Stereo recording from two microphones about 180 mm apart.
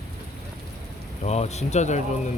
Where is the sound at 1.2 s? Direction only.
40° left (ahead or behind).